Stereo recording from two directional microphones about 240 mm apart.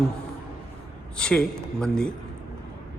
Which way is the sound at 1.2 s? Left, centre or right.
Centre.